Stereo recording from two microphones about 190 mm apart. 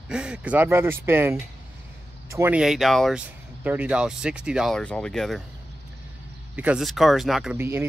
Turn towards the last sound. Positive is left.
turn(degrees=-10)  # may be behind; listen again after turning